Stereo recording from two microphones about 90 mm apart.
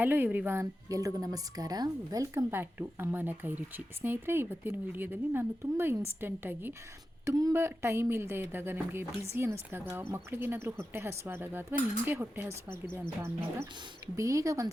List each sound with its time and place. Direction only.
0.0 s a woman's voice: 20° right (ahead or behind); by 2.3 s 45° right (ahead or behind)
2.3 s speech: 25° right (ahead or behind)
7.3 s speech: 45° right (ahead or behind)
7.5 s a woman's voice: 30° right (ahead or behind)